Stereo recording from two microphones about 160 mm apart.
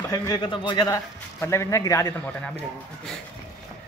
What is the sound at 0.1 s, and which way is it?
A man's voice, 25° left (ahead or behind).